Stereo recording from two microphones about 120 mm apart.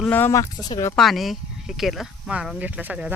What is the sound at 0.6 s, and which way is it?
Speech, 30° left (ahead or behind).